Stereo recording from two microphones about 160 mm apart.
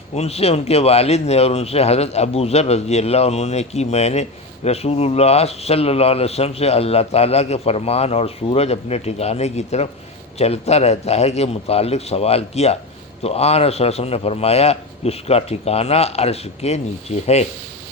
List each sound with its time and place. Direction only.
0.1 s speech: 40° left (ahead or behind)